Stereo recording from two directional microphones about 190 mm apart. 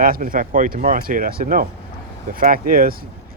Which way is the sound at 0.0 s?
45° right (ahead or behind).